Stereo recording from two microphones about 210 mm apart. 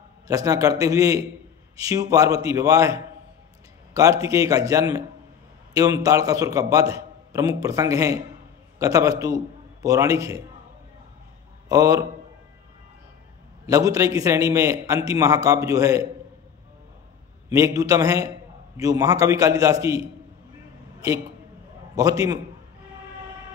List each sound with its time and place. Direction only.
0.3 s a man's voice: 15° right (ahead or behind)
11.7 s a man's voice: 15° right (ahead or behind)
13.7 s a man's voice: 15° right (ahead or behind)
17.5 s a man's voice: 15° right (ahead or behind)
21.9 s a man's voice: 15° right (ahead or behind)